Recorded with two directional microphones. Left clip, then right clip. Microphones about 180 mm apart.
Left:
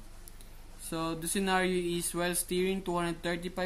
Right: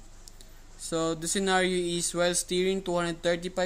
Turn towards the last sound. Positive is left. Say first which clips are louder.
# right 7 dB
turn(degrees=-30)  # may be behind; listen again after turning